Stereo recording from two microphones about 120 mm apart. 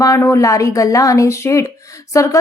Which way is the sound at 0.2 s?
25° left (ahead or behind).